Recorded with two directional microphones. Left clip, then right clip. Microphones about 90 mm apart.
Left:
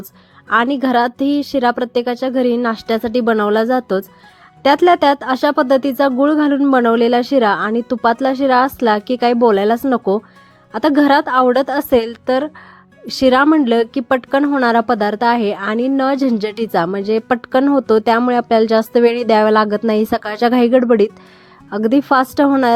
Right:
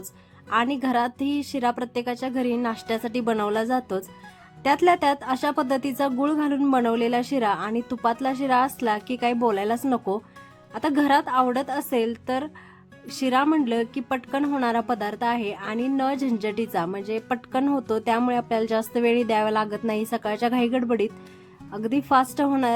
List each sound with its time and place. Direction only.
0.5 s a woman's voice: 50° left (ahead or behind)
13.1 s speech: 70° left (ahead or behind)
13.7 s a woman's voice: 60° left (ahead or behind)
15.8 s a woman's voice: 45° left (ahead or behind)